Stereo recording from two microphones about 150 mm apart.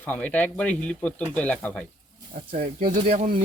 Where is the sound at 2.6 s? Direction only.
65° right (ahead or behind).